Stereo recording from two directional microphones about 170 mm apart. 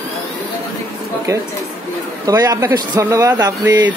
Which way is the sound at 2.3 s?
20° right (ahead or behind).